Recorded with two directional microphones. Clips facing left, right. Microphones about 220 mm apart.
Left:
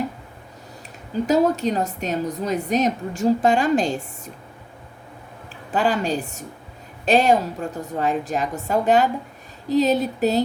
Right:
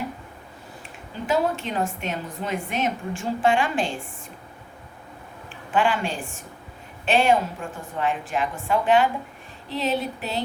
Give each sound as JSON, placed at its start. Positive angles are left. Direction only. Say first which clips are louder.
{"t": 1.1, "sound": "a woman's voice", "louder": "left 6 dB", "side_deg": 40}
{"t": 5.7, "sound": "a woman's voice", "louder": "left 2 dB", "side_deg": 40}